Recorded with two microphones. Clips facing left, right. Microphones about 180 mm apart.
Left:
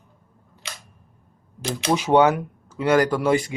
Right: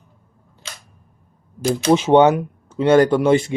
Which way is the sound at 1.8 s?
25° right (ahead or behind).